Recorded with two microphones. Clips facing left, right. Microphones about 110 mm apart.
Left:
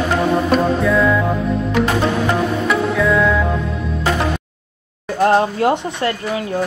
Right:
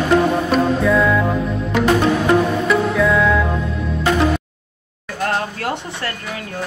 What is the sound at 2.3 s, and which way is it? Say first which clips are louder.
Music: right 2 dB; centre (ahead or behind).